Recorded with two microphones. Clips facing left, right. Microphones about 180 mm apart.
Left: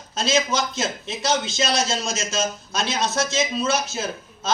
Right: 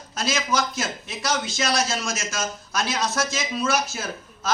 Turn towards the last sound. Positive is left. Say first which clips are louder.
# left 2 dB
turn(degrees=25)  # may be behind; listen again after turning